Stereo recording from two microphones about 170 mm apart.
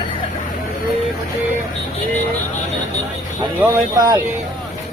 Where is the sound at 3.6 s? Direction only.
20° right (ahead or behind).